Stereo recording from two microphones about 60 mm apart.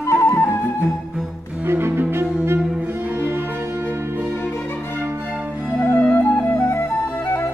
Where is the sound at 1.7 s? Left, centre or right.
Right.